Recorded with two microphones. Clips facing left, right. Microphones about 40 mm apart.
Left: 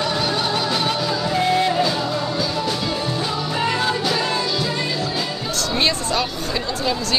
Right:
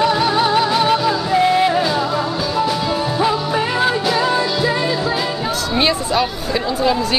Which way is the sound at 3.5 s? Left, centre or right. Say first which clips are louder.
Right 4 dB; centre.